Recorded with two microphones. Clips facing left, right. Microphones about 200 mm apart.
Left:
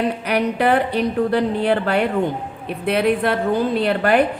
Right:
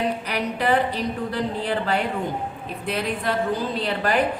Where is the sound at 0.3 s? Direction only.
60° left (ahead or behind).